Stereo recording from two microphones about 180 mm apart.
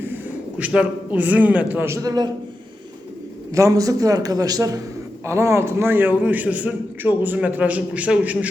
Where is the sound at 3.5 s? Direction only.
15° right (ahead or behind).